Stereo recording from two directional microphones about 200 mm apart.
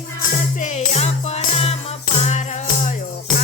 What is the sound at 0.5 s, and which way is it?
Music, 35° left (ahead or behind).